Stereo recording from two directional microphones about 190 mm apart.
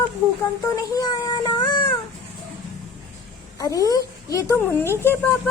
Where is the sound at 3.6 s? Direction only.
20° left (ahead or behind).